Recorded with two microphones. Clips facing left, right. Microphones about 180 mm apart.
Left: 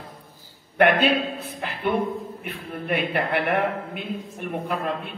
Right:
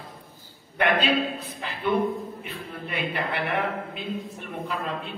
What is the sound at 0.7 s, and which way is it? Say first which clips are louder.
Speech: left 5 dB; 55° left (ahead or behind).